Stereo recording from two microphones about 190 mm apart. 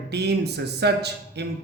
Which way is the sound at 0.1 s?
60° right (ahead or behind).